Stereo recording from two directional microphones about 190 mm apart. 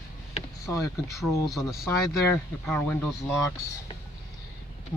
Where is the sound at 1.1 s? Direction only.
Centre (ahead or behind).